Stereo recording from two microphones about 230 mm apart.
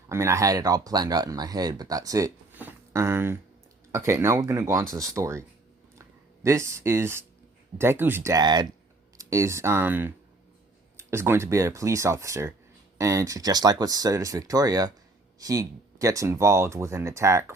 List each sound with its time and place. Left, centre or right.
0.1 s speech: centre